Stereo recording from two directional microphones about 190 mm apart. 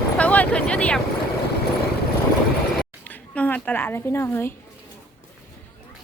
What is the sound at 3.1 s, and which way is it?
A woman's voice, 10° left (ahead or behind).